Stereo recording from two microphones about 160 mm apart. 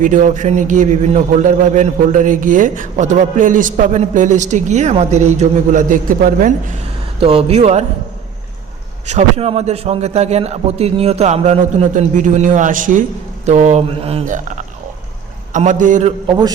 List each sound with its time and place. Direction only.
0.0 s a man's voice: 50° right (ahead or behind)
7.2 s speech: 35° right (ahead or behind)
9.0 s a man's voice: 45° right (ahead or behind)
16.2 s a man's voice: 25° right (ahead or behind)